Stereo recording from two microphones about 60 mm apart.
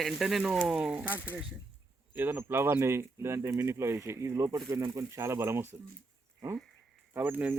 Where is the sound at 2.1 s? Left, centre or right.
Right.